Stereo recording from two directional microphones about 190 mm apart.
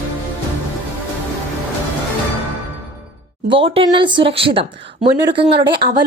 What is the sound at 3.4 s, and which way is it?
A woman's voice, 25° right (ahead or behind).